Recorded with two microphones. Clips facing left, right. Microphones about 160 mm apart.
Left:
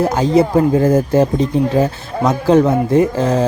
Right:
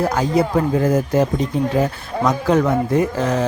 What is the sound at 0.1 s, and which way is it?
A man's voice, 25° left (ahead or behind).